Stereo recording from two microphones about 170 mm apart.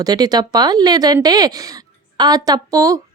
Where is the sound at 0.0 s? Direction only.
25° right (ahead or behind).